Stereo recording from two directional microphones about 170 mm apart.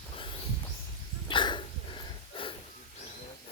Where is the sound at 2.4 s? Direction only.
30° left (ahead or behind).